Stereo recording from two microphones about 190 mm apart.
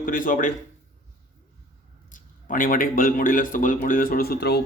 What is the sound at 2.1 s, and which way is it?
Speech, 45° left (ahead or behind).